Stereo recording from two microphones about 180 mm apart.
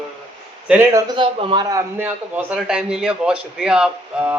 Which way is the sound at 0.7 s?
15° right (ahead or behind).